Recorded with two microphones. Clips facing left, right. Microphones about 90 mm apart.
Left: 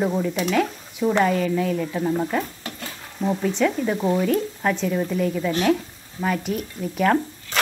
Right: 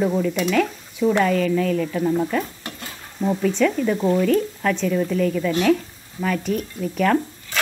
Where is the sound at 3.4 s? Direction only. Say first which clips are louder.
Right 3 dB; 25° left (ahead or behind).